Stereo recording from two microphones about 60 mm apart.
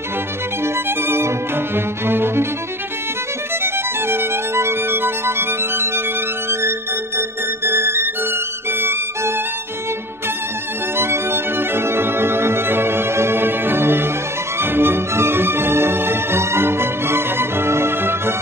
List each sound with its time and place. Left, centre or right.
0.8 s violin: right
2.0 s cello: right
3.6 s music: right
7.2 s music: right
11.0 s music: right